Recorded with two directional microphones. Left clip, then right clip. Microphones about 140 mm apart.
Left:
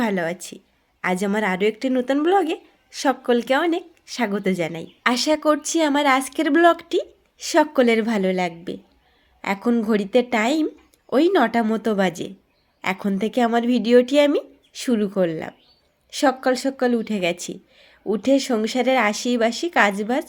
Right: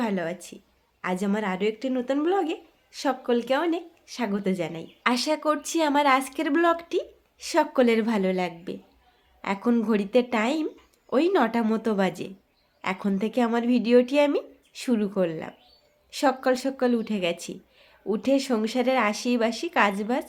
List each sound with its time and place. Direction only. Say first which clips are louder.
0.0 s speech: left 5 dB; 45° left (ahead or behind)
5.0 s speech: left 5 dB; 30° left (ahead or behind)